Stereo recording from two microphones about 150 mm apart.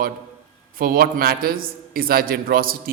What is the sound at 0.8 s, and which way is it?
A man's voice, 80° right.